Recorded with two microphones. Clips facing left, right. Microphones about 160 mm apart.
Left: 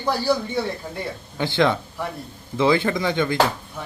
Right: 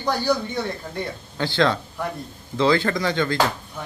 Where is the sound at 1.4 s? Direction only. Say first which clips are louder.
Left 1 dB; 20° left (ahead or behind).